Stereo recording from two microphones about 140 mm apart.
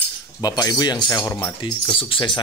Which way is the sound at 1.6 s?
35° left (ahead or behind).